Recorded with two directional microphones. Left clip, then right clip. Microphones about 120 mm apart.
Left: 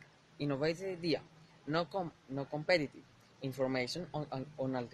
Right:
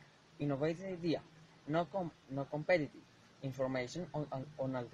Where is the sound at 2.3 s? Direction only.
45° left (ahead or behind).